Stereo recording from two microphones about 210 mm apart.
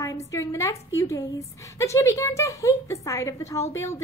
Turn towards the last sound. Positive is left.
turn(degrees=15)  # may be behind; listen again after turning